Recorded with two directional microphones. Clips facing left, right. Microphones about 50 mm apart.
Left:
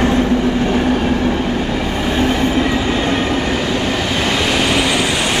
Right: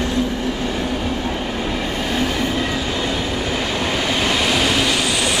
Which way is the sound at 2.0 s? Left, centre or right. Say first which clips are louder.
Left 6 dB; left.